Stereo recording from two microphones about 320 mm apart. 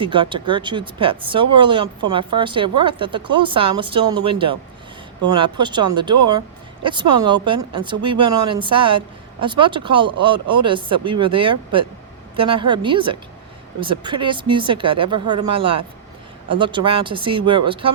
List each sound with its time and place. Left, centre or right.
0.0 s speech: centre